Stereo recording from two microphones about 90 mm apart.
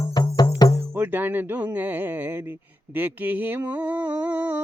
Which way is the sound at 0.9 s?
25° right (ahead or behind).